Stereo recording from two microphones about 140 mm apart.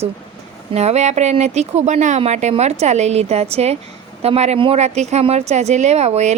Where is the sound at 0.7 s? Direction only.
50° right (ahead or behind).